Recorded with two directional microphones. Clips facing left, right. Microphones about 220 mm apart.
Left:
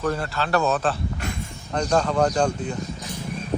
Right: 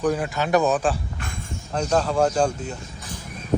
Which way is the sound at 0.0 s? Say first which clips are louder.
Right 3 dB; 15° right (ahead or behind).